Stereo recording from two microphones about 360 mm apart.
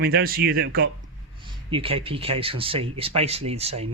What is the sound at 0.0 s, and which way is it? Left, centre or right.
Speech, right.